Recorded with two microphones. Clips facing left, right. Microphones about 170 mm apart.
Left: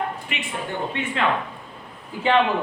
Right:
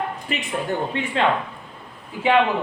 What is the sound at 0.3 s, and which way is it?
Speech, 40° right (ahead or behind).